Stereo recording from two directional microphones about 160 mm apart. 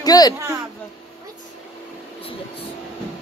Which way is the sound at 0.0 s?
25° left (ahead or behind).